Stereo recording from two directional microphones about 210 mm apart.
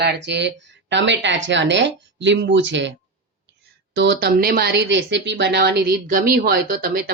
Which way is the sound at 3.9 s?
55° right (ahead or behind).